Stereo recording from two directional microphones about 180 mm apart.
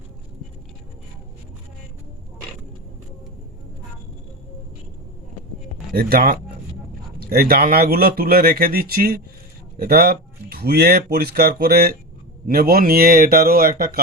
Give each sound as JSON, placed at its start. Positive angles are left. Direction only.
{"t": 5.9, "sound": "speech", "side_deg": -55}